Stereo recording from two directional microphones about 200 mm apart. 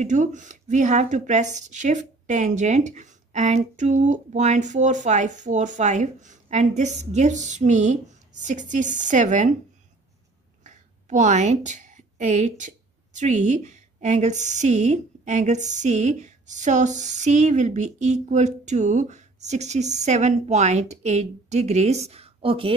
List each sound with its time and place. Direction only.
0.0 s a woman's voice: 40° right (ahead or behind)
10.6 s a woman's voice: 35° right (ahead or behind)